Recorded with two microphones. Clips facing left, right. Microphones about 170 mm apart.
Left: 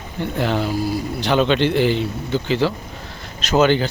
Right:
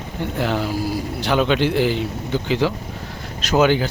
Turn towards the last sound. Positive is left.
turn(degrees=-10)  # may be behind; listen again after turning